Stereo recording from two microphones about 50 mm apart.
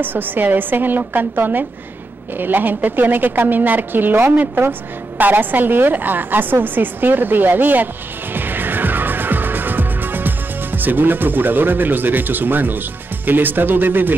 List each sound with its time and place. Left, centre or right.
0.0 s a woman's voice: right